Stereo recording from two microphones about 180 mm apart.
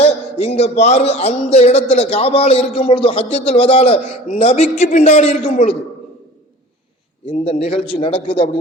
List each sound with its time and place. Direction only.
0.0 s speech: 35° left (ahead or behind)
7.3 s a man's voice: 35° left (ahead or behind)